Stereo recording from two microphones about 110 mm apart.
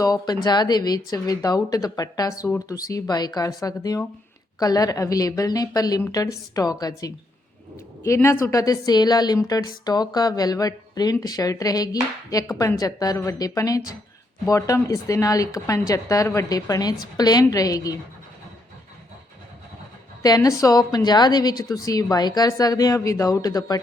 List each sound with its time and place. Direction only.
0.0 s a woman's voice: 35° left (ahead or behind)
20.2 s a woman's voice: 35° left (ahead or behind)